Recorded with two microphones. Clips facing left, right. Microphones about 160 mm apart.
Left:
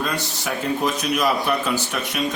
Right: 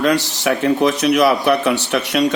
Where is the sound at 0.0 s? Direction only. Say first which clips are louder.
Right 9 dB; 85° right.